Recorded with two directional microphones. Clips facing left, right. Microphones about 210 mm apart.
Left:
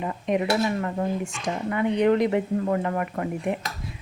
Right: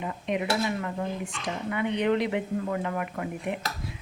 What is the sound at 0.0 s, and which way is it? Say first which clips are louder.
Speech: left 5 dB; 45° left (ahead or behind).